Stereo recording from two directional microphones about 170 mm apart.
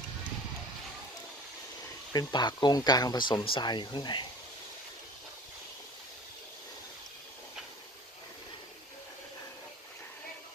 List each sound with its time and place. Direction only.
2.1 s speech: 25° left (ahead or behind)